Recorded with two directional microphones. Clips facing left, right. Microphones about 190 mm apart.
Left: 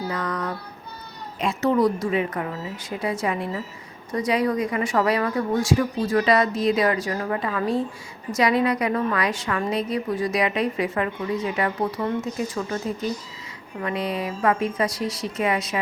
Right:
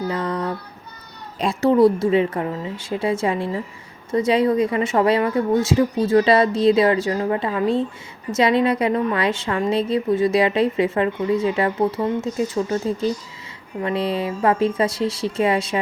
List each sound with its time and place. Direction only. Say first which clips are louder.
0.1 s child singing: right 4 dB; 30° right (ahead or behind)
1.4 s a woman's voice: right 5 dB; 30° right (ahead or behind)